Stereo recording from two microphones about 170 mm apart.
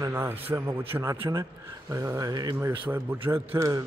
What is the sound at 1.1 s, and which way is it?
Speech, 30° right (ahead or behind).